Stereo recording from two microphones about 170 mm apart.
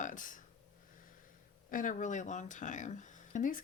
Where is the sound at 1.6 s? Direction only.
50° left (ahead or behind).